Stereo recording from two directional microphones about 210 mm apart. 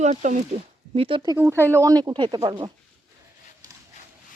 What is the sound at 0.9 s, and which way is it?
Speech, 25° right (ahead or behind).